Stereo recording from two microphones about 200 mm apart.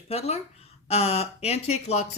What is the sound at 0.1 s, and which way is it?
Speech, 30° left (ahead or behind).